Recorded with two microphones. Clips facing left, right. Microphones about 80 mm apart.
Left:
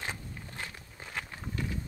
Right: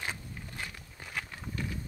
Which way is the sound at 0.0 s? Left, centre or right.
Left.